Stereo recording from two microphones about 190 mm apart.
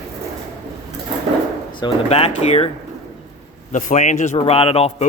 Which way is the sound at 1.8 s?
30° left (ahead or behind).